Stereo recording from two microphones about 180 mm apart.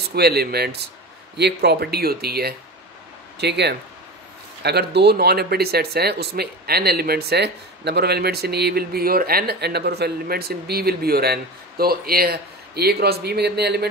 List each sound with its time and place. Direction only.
0.1 s speech: 60° right (ahead or behind)